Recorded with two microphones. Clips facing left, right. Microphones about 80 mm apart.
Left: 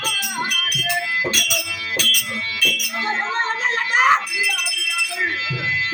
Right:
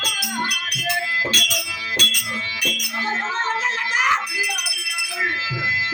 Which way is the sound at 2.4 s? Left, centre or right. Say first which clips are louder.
Left 2 dB; centre.